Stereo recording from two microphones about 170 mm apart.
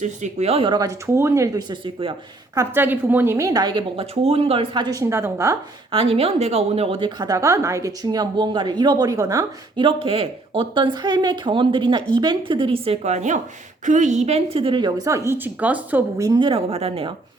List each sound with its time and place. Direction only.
0.0 s a woman's voice: 45° right (ahead or behind)
2.6 s a woman's voice: 10° right (ahead or behind)
5.9 s a woman's voice: 35° right (ahead or behind)
9.8 s a woman's voice: 30° right (ahead or behind)